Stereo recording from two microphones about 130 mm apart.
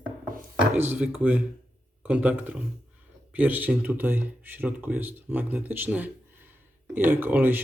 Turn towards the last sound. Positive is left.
turn(degrees=-15)  # may be behind; listen again after turning